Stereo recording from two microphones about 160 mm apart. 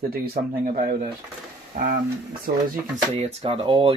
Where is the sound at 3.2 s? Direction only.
40° right (ahead or behind).